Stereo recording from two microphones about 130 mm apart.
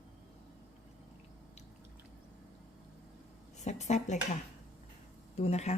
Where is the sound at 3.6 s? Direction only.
60° left (ahead or behind).